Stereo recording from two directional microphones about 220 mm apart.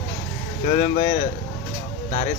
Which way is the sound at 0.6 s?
25° left (ahead or behind).